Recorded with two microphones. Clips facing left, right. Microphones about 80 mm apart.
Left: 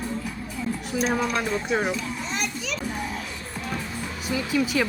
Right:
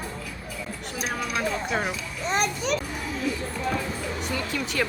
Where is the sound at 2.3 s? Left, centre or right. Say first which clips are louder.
Right 9 dB; right.